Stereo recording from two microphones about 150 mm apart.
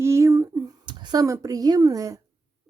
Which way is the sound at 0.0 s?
20° right (ahead or behind).